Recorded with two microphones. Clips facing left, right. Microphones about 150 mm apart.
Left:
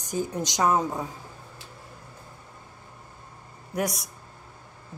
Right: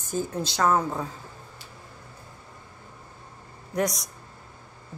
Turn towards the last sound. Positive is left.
turn(degrees=10)  # may be behind; listen again after turning